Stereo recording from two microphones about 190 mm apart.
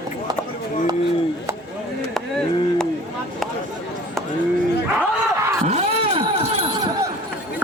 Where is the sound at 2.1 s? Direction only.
Centre (ahead or behind).